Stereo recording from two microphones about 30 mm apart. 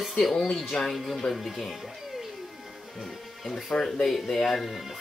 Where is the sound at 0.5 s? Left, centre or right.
Centre.